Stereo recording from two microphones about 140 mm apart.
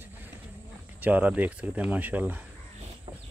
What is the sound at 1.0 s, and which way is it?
Speech, 10° right (ahead or behind).